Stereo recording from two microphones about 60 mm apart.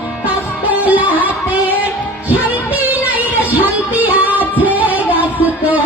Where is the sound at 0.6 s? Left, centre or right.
Right.